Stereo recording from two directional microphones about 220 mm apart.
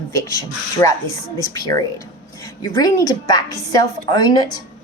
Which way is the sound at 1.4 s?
15° left (ahead or behind).